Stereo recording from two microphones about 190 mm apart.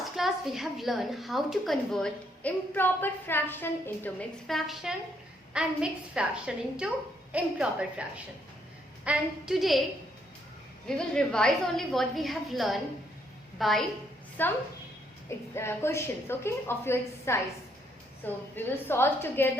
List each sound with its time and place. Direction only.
0.0 s a woman's voice: centre (ahead or behind)
10.8 s a woman's voice: 5° left (ahead or behind)